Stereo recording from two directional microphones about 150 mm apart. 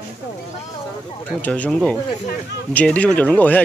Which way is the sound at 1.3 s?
10° left (ahead or behind).